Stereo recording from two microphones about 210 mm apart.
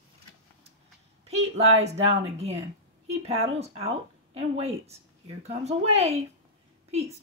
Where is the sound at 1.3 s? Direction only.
30° right (ahead or behind).